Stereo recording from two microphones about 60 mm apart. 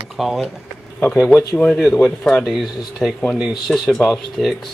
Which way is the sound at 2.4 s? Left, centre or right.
Centre.